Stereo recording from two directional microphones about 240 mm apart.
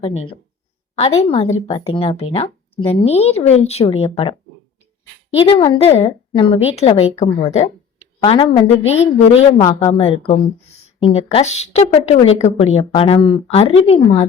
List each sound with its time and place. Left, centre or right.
0.0 s a woman's voice: left
5.5 s a woman's voice: left